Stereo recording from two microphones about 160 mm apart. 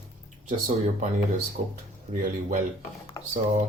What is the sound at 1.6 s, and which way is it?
Speech, 45° right (ahead or behind).